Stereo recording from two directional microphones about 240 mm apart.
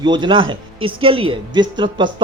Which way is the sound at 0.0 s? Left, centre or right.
Centre.